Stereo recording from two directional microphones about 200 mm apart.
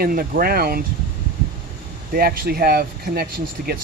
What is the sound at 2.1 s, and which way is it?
Speech, 50° right (ahead or behind).